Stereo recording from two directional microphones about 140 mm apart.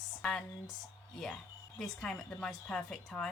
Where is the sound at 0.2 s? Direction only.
5° left (ahead or behind).